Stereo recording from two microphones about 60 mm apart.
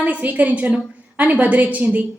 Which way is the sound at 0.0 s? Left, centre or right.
Right.